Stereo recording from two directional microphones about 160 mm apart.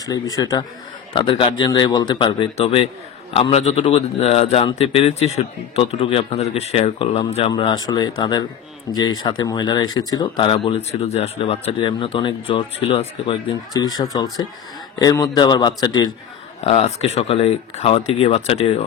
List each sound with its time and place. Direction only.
0.0 s speech: 20° left (ahead or behind)
7.8 s speech: 25° left (ahead or behind)
13.7 s speech: 25° left (ahead or behind)
16.6 s speech: 40° left (ahead or behind)